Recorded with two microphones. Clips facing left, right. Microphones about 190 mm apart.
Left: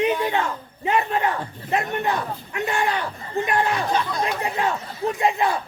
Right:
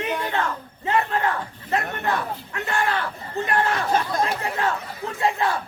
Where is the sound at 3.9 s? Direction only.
45° right (ahead or behind).